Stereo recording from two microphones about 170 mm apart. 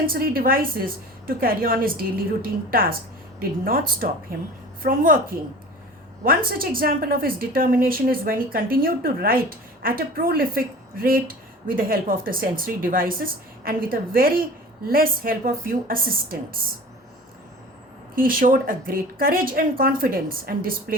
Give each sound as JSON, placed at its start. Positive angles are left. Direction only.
{"t": 0.0, "sound": "a woman's voice", "side_deg": -60}
{"t": 18.1, "sound": "a woman's voice", "side_deg": -55}